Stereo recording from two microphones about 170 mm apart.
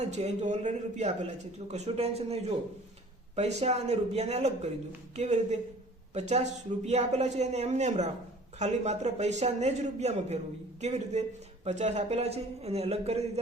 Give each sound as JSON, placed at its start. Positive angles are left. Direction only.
{"t": 0.0, "sound": "a man's voice", "side_deg": -40}